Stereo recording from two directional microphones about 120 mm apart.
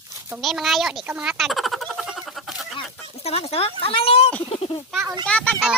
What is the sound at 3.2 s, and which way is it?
Speech, 55° left (ahead or behind).